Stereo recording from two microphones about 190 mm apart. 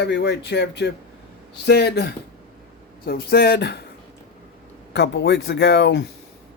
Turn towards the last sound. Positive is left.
turn(degrees=70)  # may be behind; listen again after turning